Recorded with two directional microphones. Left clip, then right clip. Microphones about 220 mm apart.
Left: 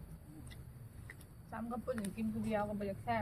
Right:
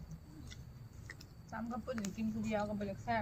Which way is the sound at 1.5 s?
15° left (ahead or behind).